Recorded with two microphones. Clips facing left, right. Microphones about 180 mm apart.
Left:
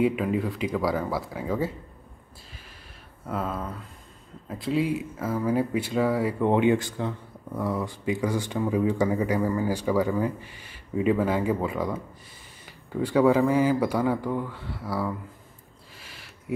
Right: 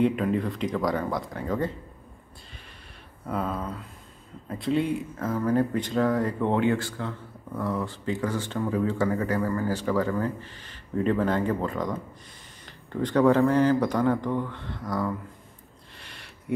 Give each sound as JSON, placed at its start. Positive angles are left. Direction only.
{"t": 0.0, "sound": "speech", "side_deg": 5}
{"t": 3.3, "sound": "speech", "side_deg": 0}
{"t": 16.0, "sound": "a sound", "side_deg": 0}